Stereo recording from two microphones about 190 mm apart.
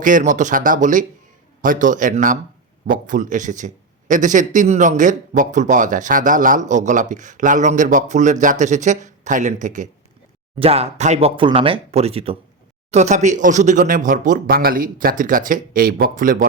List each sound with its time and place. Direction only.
0.0 s speech: 45° right (ahead or behind)